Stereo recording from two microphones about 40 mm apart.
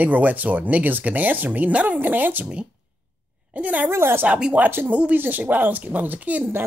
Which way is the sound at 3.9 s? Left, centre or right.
Right.